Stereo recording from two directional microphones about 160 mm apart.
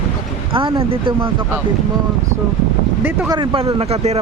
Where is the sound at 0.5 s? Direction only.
35° right (ahead or behind).